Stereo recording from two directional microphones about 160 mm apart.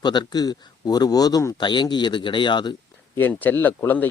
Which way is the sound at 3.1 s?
10° left (ahead or behind).